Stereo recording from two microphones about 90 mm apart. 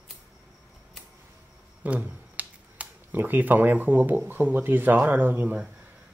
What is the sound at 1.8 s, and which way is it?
Speech, 15° right (ahead or behind).